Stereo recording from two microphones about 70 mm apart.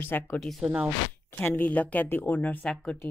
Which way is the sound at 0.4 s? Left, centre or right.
Centre.